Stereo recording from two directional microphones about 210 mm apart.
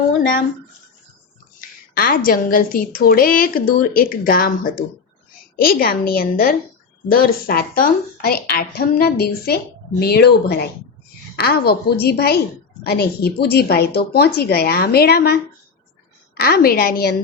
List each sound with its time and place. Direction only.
2.0 s a woman's voice: 45° left (ahead or behind)